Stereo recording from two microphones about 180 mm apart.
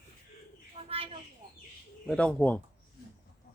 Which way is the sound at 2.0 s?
5° left (ahead or behind).